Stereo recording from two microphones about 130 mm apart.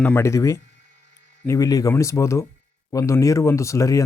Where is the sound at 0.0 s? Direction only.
20° left (ahead or behind).